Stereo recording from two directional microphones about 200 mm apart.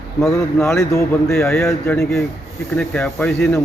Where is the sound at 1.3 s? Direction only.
Centre (ahead or behind).